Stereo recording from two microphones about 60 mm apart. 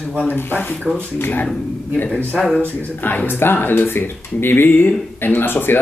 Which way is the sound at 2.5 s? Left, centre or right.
Left.